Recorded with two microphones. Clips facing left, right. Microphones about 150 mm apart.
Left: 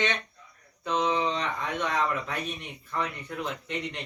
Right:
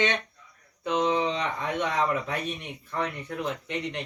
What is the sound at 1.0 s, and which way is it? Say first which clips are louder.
Speech: right 2 dB; 25° right (ahead or behind).